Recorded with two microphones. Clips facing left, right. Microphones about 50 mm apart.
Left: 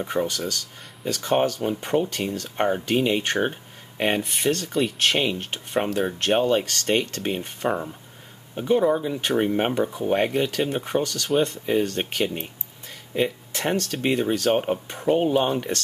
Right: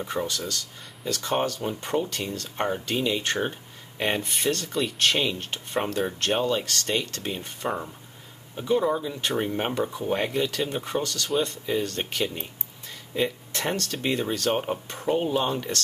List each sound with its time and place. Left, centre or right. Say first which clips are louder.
0.0 s speech: left 4 dB; centre
4.0 s speech: left 3 dB; centre